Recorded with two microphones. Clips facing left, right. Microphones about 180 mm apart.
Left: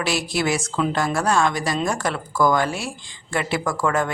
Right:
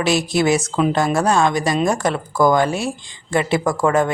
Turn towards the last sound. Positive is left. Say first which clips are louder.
# right 5 dB
turn(degrees=-20)  # may be behind; listen again after turning